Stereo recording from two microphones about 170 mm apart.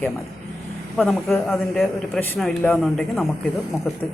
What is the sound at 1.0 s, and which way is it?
Speech, centre (ahead or behind).